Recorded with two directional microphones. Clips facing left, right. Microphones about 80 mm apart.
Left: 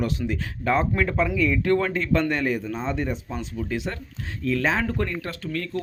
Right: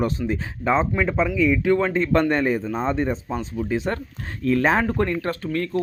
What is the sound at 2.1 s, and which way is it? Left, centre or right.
Speech, right.